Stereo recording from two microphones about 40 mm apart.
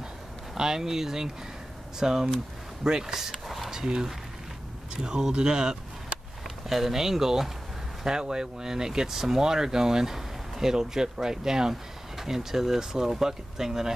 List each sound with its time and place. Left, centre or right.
0.6 s speech: centre
3.3 s a sound: centre
3.7 s speech: centre
6.7 s speech: centre